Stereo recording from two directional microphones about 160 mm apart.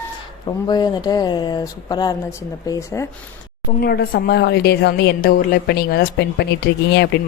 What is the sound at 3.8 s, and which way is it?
A woman's voice, 75° left (ahead or behind).